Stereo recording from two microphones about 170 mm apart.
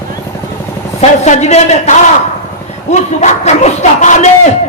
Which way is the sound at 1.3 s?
40° left (ahead or behind).